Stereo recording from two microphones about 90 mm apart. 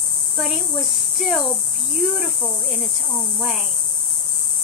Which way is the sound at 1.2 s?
Centre (ahead or behind).